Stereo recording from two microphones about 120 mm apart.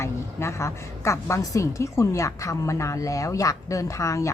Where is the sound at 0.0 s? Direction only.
25° left (ahead or behind).